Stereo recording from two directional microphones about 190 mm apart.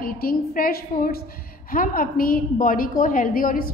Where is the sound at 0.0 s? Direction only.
50° left (ahead or behind).